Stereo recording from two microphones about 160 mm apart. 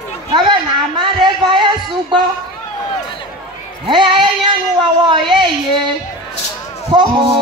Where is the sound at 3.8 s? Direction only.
30° right (ahead or behind).